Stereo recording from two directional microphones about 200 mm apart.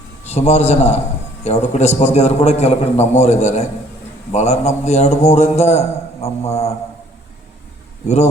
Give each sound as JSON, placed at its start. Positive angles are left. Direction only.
{"t": 0.3, "sound": "a man's voice", "side_deg": 35}
{"t": 8.0, "sound": "a man's voice", "side_deg": 35}